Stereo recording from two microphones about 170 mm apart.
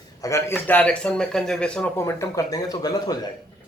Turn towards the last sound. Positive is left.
turn(degrees=20)  # may be behind; listen again after turning